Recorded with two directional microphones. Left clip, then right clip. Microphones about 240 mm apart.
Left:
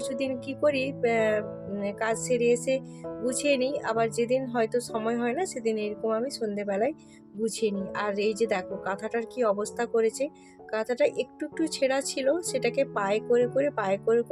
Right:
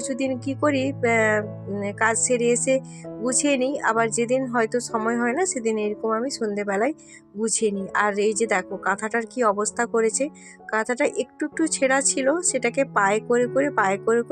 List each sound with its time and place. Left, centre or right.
0.0 s music: centre
2.3 s speech: centre
4.9 s music: centre
5.5 s speech: centre
6.0 s music: centre
7.4 s speech: centre
13.2 s music: centre
13.5 s speech: centre